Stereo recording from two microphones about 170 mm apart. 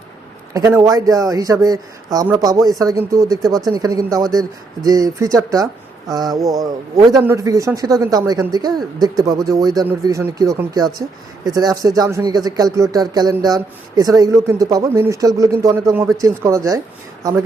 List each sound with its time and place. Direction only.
0.5 s speech: 20° right (ahead or behind)